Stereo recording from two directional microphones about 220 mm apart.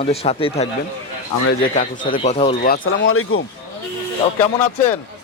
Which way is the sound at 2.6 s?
40° left (ahead or behind).